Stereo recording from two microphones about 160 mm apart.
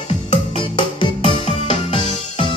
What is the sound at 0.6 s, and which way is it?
Music, 30° left (ahead or behind).